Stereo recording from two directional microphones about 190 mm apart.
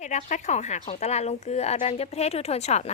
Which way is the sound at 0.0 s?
40° left (ahead or behind).